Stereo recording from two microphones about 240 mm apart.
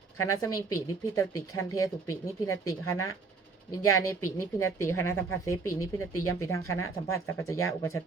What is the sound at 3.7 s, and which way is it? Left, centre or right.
Speech, centre.